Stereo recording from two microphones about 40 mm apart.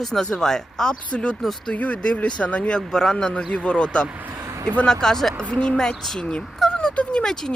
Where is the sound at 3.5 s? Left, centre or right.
Left.